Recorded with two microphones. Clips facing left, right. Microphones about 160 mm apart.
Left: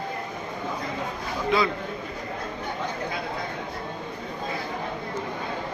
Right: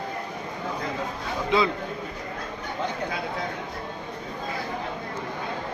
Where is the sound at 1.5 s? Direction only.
20° right (ahead or behind).